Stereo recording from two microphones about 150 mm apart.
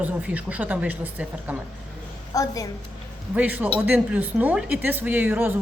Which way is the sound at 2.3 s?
25° left (ahead or behind).